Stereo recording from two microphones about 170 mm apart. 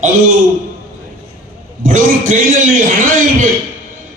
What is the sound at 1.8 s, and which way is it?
A man's voice, 50° right (ahead or behind).